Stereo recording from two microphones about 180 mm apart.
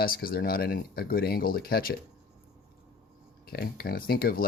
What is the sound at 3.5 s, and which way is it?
Speech, 60° left (ahead or behind).